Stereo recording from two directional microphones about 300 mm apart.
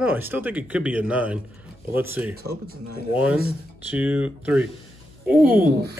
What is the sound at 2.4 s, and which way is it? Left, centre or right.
Speech, right.